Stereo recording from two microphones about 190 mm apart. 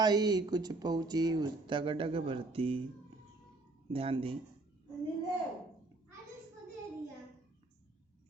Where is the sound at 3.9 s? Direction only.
30° right (ahead or behind).